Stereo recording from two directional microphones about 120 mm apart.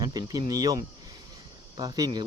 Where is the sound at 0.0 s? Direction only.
30° right (ahead or behind).